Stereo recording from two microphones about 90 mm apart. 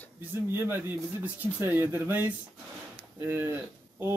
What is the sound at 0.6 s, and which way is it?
Speech, 25° right (ahead or behind).